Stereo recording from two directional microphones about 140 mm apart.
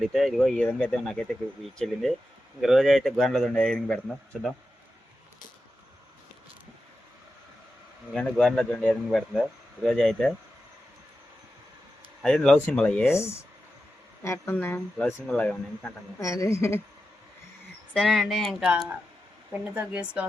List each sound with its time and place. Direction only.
0.0 s speech: centre (ahead or behind)
8.1 s speech: 5° left (ahead or behind)
12.2 s speech: 5° left (ahead or behind)
13.1 s speech: 20° left (ahead or behind)
16.2 s speech: 20° left (ahead or behind)
17.9 s speech: centre (ahead or behind)